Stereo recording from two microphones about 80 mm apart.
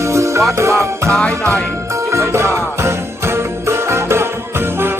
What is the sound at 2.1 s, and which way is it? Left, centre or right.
Jingle bell, right.